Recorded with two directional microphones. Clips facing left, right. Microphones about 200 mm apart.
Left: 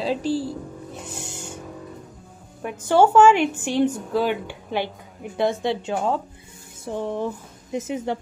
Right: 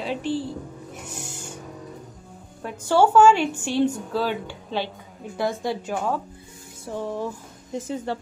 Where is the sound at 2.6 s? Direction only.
20° left (ahead or behind).